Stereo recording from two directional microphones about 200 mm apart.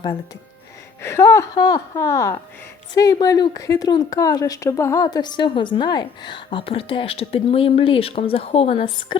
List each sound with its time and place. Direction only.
1.0 s a woman's voice: 15° left (ahead or behind)